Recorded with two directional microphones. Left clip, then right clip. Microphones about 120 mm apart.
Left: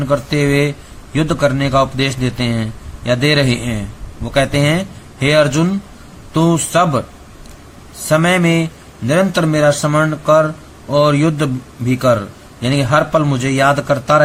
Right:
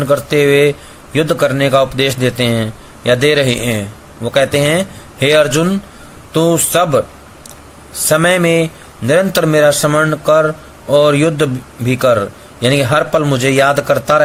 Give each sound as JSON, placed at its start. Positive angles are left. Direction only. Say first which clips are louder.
{"t": 0.0, "sound": "a man's voice", "louder": "right 5 dB", "side_deg": -30}
{"t": 8.1, "sound": "a man's voice", "louder": "right 3 dB", "side_deg": -35}